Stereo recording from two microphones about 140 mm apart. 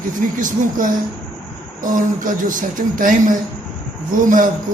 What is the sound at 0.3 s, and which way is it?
A woman's voice, 70° right (ahead or behind).